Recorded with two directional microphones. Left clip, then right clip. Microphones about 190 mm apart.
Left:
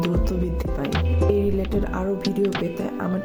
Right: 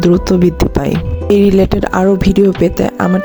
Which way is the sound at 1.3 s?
55° right (ahead or behind).